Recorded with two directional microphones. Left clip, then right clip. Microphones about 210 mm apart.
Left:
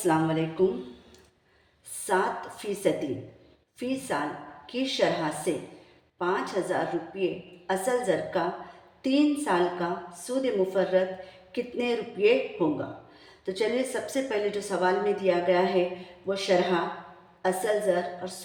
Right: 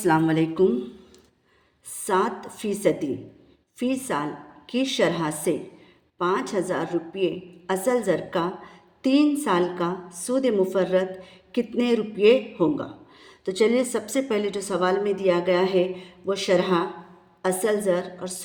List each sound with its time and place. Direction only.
0.0 s a woman's voice: 45° right (ahead or behind)
2.0 s a woman's voice: 35° right (ahead or behind)